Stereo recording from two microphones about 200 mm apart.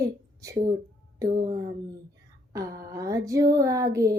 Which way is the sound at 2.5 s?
15° right (ahead or behind).